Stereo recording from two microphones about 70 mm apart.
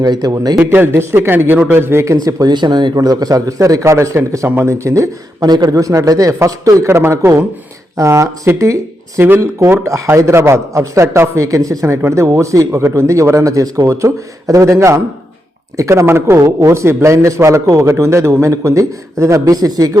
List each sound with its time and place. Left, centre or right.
0.0 s speech: right
0.6 s speech: right
2.2 s speech: right
4.4 s speech: right
4.7 s a man's voice: right
5.4 s a man's voice: right
19.5 s speech: right